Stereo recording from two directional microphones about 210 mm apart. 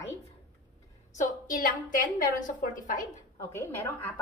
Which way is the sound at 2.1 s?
40° left (ahead or behind).